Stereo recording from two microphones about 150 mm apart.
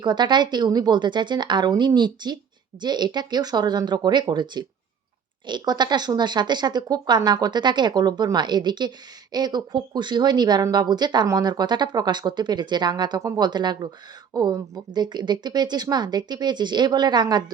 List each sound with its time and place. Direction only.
0.0 s speech: 30° right (ahead or behind)